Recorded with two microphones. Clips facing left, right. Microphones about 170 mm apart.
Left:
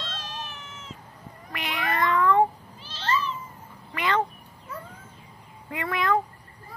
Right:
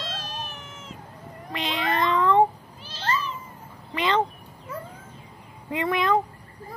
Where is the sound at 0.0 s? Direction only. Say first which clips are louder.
Right 2 dB; 10° right (ahead or behind).